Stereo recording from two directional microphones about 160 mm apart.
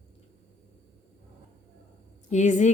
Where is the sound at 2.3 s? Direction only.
50° left (ahead or behind).